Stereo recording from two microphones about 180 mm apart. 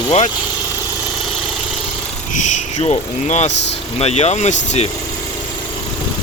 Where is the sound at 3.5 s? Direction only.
75° left (ahead or behind).